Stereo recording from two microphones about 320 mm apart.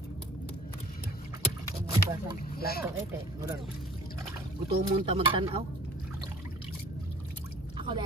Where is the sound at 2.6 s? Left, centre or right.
Left.